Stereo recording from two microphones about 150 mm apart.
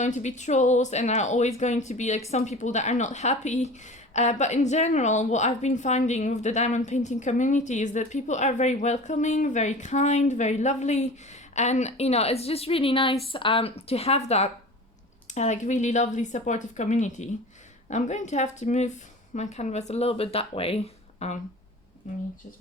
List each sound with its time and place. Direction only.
0.0 s a woman's voice: 50° left (ahead or behind)